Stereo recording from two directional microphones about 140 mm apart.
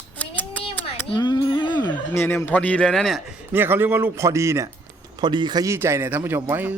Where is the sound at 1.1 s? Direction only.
30° left (ahead or behind).